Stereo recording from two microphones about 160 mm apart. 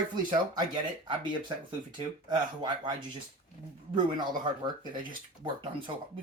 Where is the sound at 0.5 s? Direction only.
30° right (ahead or behind).